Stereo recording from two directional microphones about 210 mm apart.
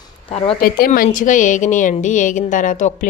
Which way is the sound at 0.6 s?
45° left (ahead or behind).